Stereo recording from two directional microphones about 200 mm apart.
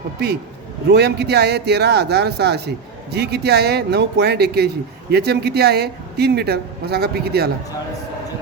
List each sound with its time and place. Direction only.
0.9 s a man's voice: 55° right (ahead or behind)